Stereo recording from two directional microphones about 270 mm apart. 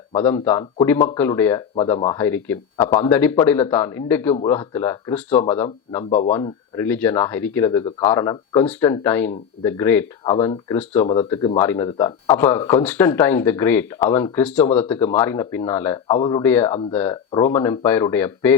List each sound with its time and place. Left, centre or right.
0.1 s speech: centre
6.1 s speech: left
6.3 s speech: centre
11.0 s speech: left
11.3 s speech: centre
16.1 s speech: centre
16.4 s speech: centre